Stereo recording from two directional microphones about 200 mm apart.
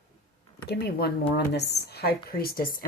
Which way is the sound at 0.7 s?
55° left (ahead or behind).